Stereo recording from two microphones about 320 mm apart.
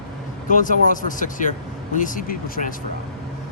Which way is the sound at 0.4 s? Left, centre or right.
Left.